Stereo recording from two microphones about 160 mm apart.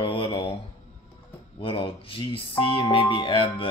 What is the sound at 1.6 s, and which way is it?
Speech, 35° left (ahead or behind).